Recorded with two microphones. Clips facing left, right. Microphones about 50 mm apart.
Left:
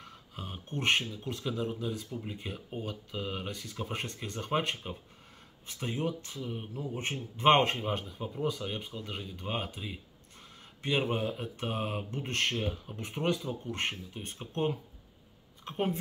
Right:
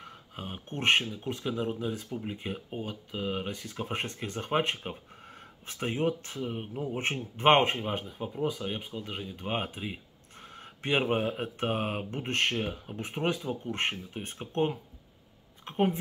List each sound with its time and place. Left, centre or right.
0.0 s speech: right
2.7 s speech: centre; by 7.4 s right
7.4 s speech: centre
9.5 s speech: right
15.6 s a woman's voice: right